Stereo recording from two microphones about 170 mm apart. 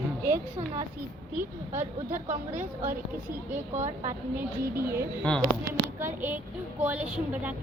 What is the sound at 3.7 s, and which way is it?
Speech, 45° right (ahead or behind).